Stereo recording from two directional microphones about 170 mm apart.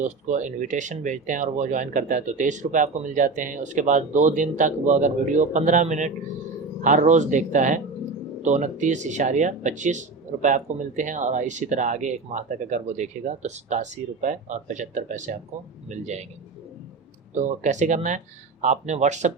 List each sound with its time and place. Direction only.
0.0 s speech: 45° right (ahead or behind)
17.3 s speech: 45° right (ahead or behind)